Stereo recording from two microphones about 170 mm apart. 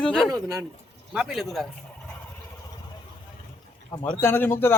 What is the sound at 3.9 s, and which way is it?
Speech, 25° left (ahead or behind).